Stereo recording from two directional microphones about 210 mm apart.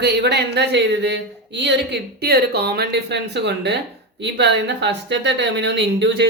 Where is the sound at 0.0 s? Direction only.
55° right (ahead or behind).